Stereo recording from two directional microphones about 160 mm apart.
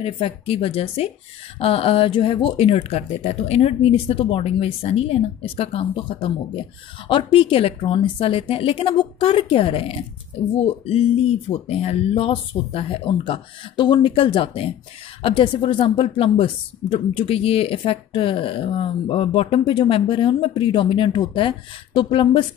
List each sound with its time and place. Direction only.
0.0 s speech: 35° left (ahead or behind)